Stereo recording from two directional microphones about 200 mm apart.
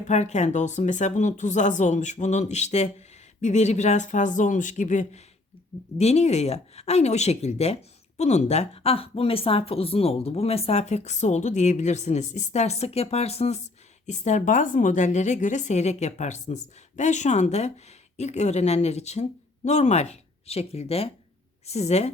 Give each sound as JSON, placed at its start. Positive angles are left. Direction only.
{"t": 0.1, "sound": "speech", "side_deg": 35}